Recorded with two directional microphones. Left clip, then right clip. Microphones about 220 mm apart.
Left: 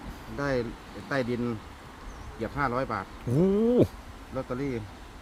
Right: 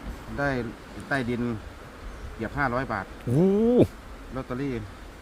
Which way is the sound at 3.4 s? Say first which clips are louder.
Right 2 dB; 5° right (ahead or behind).